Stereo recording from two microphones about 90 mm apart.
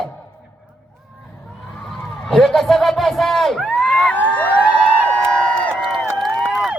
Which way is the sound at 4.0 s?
15° left (ahead or behind).